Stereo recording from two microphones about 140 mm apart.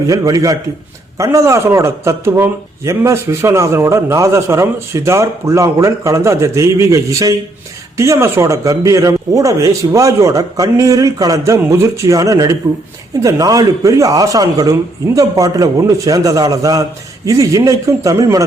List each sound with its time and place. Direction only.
0.1 s a man's voice: 25° right (ahead or behind)